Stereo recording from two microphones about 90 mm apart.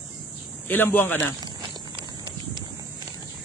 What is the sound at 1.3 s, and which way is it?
Walk, 50° right (ahead or behind).